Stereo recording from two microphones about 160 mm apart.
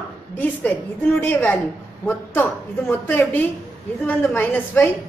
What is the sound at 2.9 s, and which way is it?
A woman's voice, 10° left (ahead or behind).